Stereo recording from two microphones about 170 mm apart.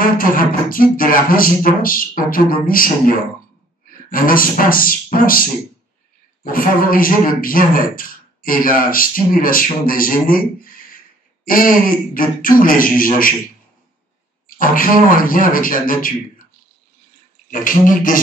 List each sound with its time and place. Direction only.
0.0 s a man's voice: 55° left (ahead or behind)
14.5 s a man's voice: 55° left (ahead or behind)
17.5 s speech: 50° left (ahead or behind)